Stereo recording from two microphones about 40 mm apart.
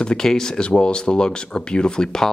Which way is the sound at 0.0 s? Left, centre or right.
Centre.